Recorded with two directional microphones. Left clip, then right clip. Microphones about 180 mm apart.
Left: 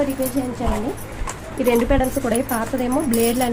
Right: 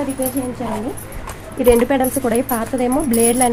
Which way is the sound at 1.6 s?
50° right (ahead or behind).